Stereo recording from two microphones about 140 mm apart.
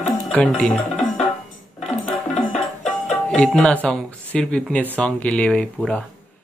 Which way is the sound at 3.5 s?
Centre (ahead or behind).